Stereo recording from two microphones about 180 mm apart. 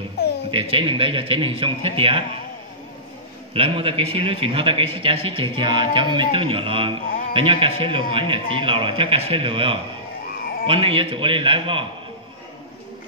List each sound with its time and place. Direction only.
0.5 s a man's voice: 30° right (ahead or behind)
3.5 s a man's voice: 30° right (ahead or behind)